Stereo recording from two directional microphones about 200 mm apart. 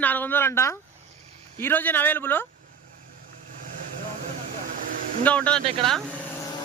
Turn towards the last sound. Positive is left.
turn(degrees=0)  # may be behind; listen again after turning